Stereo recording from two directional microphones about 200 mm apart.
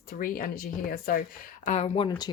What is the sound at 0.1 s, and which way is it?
Speech, 45° left (ahead or behind).